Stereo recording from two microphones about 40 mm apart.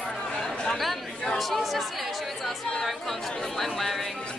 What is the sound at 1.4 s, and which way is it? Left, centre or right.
Speech, centre.